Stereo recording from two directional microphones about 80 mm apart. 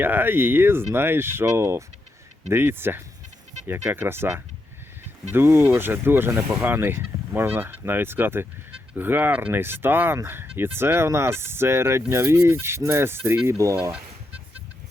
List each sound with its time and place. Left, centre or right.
0.0 s speech: right